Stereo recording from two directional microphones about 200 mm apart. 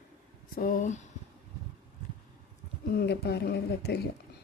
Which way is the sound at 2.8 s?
55° left (ahead or behind).